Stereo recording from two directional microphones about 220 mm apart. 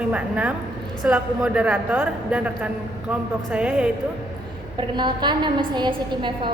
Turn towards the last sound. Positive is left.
turn(degrees=-20)  # may be behind; listen again after turning